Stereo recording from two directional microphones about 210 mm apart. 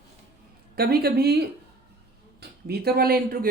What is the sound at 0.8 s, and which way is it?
Speech, 45° right (ahead or behind).